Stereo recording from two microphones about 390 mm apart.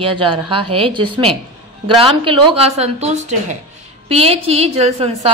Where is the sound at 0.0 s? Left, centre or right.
Centre.